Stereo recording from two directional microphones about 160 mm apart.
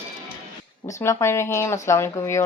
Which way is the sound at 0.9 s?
20° left (ahead or behind).